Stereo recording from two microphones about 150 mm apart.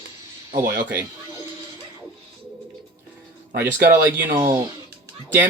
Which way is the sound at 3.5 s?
90° right.